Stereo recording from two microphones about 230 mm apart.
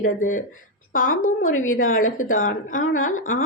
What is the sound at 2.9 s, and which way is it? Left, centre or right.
Speech, left.